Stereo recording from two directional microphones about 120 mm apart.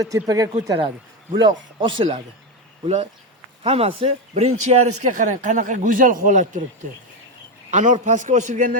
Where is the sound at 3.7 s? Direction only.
50° right (ahead or behind); by 6.6 s 90° right.